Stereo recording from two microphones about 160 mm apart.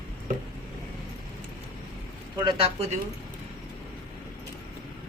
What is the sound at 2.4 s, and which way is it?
Speech, 35° right (ahead or behind).